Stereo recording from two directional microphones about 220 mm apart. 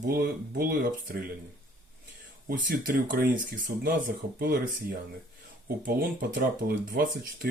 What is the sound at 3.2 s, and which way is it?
Speech, 40° right (ahead or behind).